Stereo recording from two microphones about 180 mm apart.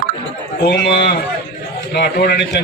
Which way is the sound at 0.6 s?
65° left (ahead or behind).